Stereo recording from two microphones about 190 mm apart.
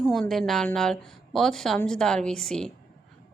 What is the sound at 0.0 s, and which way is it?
A woman's voice, centre (ahead or behind).